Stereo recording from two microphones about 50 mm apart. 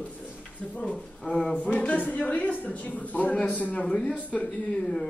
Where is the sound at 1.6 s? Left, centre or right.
Left.